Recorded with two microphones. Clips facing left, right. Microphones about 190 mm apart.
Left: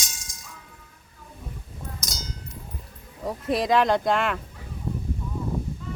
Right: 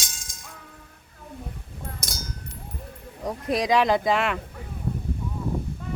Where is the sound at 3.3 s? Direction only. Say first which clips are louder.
Even; centre (ahead or behind).